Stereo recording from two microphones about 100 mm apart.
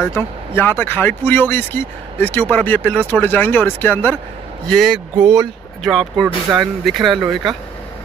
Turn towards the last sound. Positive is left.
turn(degrees=0)  # may be behind; listen again after turning